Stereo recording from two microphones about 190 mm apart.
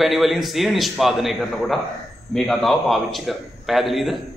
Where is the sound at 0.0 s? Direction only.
Centre (ahead or behind).